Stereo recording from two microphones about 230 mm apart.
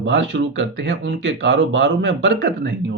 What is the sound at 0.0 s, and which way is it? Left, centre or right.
Speech, right.